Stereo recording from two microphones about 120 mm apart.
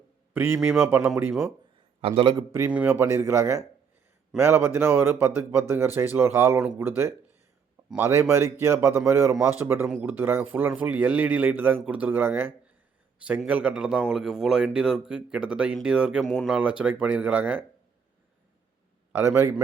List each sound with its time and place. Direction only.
0.3 s a man's voice: 15° right (ahead or behind)
2.0 s a man's voice: 55° right (ahead or behind)
2.6 s a man's voice: 10° right (ahead or behind)
3.0 s a man's voice: 20° right (ahead or behind); by 16.2 s 5° right (ahead or behind)
16.2 s speech: 5° left (ahead or behind)
16.5 s a man's voice: 10° right (ahead or behind)
19.1 s speech: 20° right (ahead or behind)